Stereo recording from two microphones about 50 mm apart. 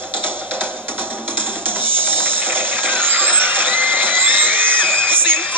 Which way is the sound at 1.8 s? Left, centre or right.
Right.